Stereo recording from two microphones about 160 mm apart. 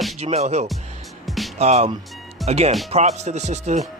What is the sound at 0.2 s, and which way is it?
Speech, 40° right (ahead or behind).